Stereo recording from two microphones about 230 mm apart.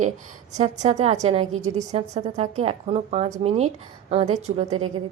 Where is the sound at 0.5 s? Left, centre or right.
Right.